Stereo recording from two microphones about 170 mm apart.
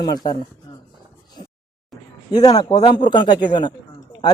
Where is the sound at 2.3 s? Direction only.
25° left (ahead or behind).